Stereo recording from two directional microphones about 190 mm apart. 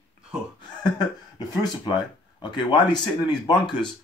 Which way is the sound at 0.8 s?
20° left (ahead or behind).